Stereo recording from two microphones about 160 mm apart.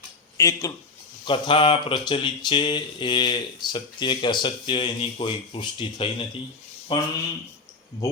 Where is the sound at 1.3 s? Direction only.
35° left (ahead or behind).